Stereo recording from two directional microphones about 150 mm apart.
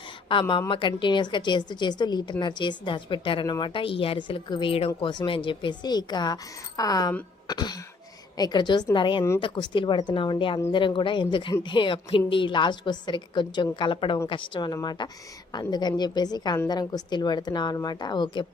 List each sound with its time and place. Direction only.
0.3 s a woman's voice: 35° left (ahead or behind)
7.4 s throat clearing: 25° left (ahead or behind)
8.4 s a woman's voice: 30° left (ahead or behind)